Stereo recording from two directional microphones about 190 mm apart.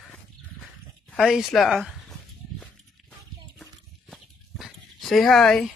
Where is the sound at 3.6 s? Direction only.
Centre (ahead or behind).